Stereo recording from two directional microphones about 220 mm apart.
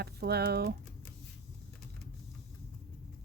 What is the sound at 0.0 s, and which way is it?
Speech, 45° right (ahead or behind).